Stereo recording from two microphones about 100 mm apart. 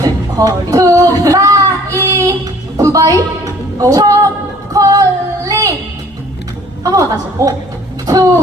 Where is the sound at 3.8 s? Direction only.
35° right (ahead or behind).